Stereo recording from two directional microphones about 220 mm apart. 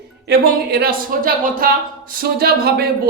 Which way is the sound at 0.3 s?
45° right (ahead or behind).